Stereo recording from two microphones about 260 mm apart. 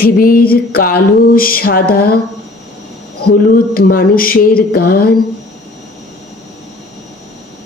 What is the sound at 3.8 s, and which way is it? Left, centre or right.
Speech, left.